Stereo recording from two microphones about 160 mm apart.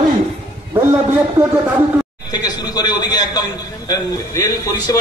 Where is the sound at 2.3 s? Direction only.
25° left (ahead or behind).